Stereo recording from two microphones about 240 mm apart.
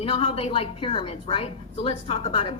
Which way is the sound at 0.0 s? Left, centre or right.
Left.